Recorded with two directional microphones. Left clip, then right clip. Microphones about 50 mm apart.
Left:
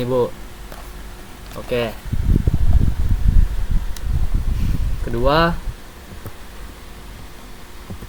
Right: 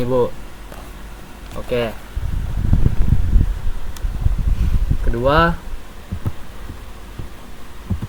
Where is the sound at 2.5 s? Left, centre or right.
Left.